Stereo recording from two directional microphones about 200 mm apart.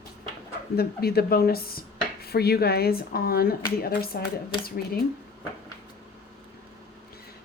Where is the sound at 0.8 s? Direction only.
50° left (ahead or behind).